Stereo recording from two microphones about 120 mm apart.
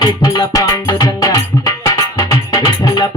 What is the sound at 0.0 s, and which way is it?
Music, 35° left (ahead or behind).